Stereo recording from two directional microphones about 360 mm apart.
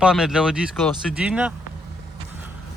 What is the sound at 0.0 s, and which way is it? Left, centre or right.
Speech, centre.